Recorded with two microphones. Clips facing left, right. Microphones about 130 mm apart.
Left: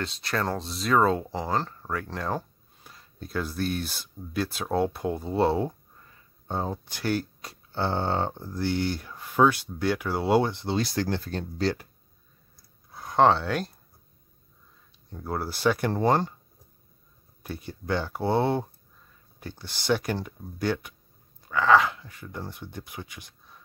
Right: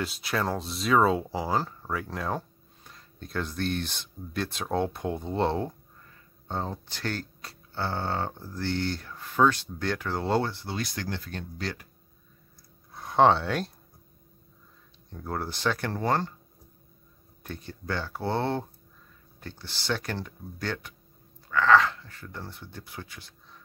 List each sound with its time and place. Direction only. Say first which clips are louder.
0.0 s speech: even; 5° right (ahead or behind); by 11.9 s 30° left (ahead or behind)
12.9 s speech: even; centre (ahead or behind)
15.0 s speech: left 2 dB; 5° left (ahead or behind)
17.4 s speech: left 3 dB; 10° left (ahead or behind)